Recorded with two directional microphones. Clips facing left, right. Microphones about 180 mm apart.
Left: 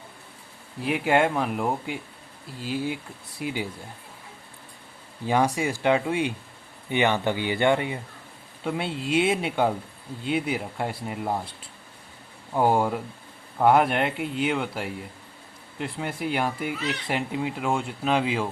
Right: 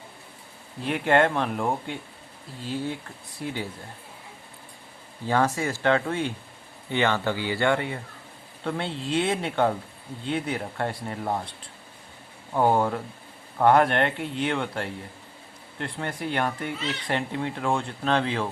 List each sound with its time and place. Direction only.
0.8 s speech: 5° left (ahead or behind)
5.2 s speech: 15° left (ahead or behind)
12.5 s speech: 10° left (ahead or behind)